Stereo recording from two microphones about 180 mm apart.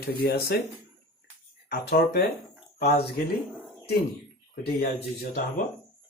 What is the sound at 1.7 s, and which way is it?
Speech, 60° left (ahead or behind).